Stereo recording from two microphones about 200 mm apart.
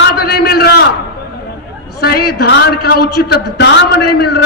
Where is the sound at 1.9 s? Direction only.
50° left (ahead or behind).